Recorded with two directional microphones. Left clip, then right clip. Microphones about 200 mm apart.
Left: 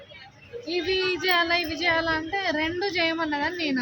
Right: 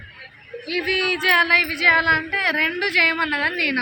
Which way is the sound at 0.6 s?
20° left (ahead or behind).